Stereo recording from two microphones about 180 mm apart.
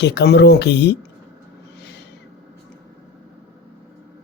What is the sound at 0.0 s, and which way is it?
Speech, 70° left (ahead or behind).